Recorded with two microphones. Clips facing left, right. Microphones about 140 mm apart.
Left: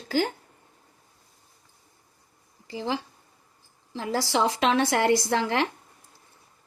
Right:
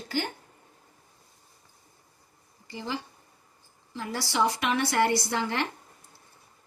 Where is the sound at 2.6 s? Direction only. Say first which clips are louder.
Left 5 dB; 90° left.